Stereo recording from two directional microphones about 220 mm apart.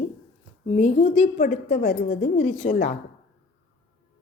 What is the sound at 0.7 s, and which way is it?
A woman's voice, 30° left (ahead or behind).